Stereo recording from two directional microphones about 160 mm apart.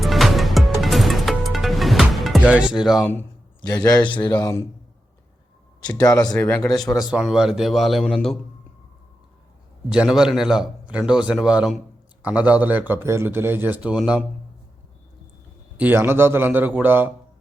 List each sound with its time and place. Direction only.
0.0 s music: centre (ahead or behind)
3.7 s a man's voice: 25° left (ahead or behind)
6.1 s a man's voice: 20° left (ahead or behind)
6.3 s a man's voice: 10° left (ahead or behind)
6.7 s a man's voice: centre (ahead or behind)
9.9 s a man's voice: 5° right (ahead or behind)
15.8 s a man's voice: 15° right (ahead or behind)